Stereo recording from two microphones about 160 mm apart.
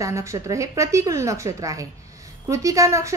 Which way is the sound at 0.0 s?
20° right (ahead or behind).